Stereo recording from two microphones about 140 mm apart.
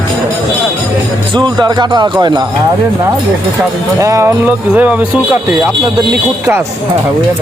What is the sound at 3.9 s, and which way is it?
Music, 25° right (ahead or behind).